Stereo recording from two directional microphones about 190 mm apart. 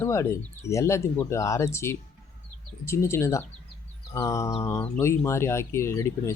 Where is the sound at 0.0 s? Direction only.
15° left (ahead or behind).